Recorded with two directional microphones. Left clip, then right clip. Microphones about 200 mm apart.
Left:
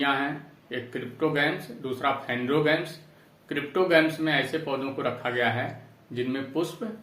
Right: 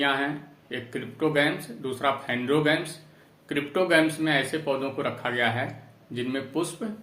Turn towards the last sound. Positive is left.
turn(degrees=-25)  # may be behind; listen again after turning